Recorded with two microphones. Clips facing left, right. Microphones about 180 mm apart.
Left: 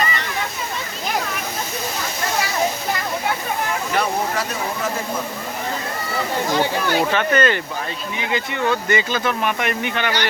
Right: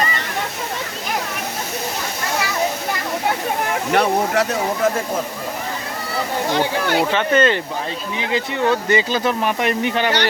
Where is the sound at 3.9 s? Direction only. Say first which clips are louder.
Right 6 dB; 70° right (ahead or behind).